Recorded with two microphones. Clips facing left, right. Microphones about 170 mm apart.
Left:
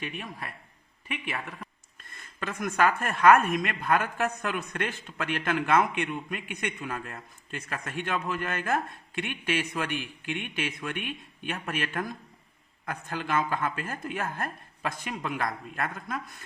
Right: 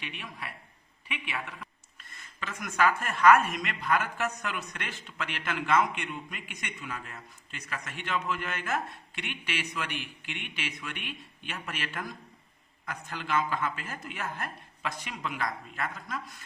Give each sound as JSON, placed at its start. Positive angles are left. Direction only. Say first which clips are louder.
{"t": 0.0, "sound": "a man's voice", "louder": "left 4 dB", "side_deg": 40}